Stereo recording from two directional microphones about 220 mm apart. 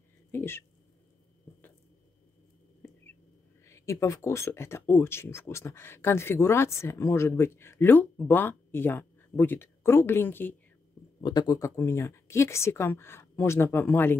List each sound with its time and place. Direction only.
0.3 s speech: 10° left (ahead or behind)
2.8 s a sound: 10° left (ahead or behind)
3.6 s speech: 15° left (ahead or behind)